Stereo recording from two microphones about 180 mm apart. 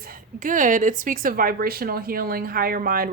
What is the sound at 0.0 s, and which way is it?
Speech, 50° right (ahead or behind).